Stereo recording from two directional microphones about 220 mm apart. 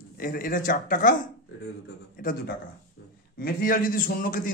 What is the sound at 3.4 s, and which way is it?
A man's voice, 40° left (ahead or behind).